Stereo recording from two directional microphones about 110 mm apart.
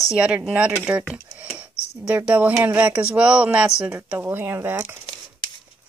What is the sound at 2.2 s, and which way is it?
A woman's voice, 15° right (ahead or behind).